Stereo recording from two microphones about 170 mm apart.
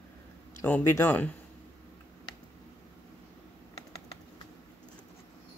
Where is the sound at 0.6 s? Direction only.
15° left (ahead or behind).